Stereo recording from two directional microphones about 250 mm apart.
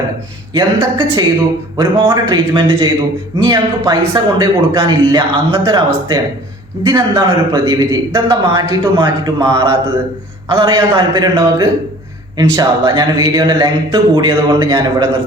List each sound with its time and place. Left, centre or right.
0.5 s a man's voice: centre
6.8 s a man's voice: centre